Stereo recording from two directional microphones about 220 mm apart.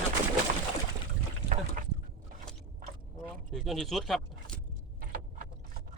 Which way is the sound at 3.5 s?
Centre (ahead or behind).